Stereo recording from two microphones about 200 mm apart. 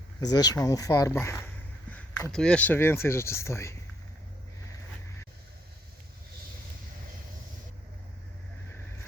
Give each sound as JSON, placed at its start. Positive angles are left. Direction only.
{"t": 0.2, "sound": "speech", "side_deg": 20}